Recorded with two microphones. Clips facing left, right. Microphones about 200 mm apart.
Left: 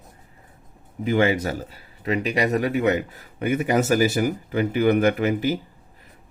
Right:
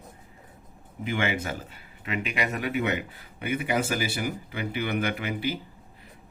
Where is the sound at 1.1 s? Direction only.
40° left (ahead or behind).